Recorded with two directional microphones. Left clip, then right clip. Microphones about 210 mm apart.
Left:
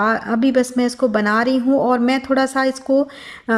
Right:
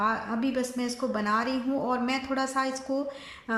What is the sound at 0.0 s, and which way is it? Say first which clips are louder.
A woman's voice: left 10 dB; 40° left (ahead or behind).